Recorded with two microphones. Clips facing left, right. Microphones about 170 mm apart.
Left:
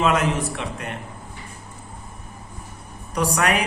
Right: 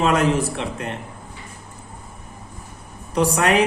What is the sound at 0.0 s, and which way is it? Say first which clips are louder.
Speech: right 2 dB; 35° right (ahead or behind).